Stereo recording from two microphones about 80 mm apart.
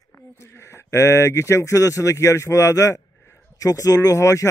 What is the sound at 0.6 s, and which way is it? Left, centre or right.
A man's voice, left.